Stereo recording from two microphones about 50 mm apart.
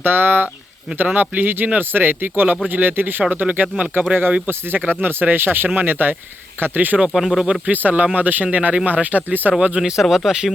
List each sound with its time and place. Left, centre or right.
0.0 s speech: right
3.4 s speech: right
4.1 s speech: right
7.1 s speech: centre
7.7 s speech: right
9.8 s speech: centre